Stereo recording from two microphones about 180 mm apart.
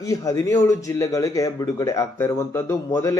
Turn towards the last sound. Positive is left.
turn(degrees=15)  # may be behind; listen again after turning